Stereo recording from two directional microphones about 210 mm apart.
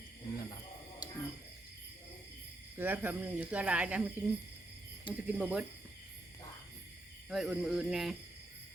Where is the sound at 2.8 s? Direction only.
10° right (ahead or behind).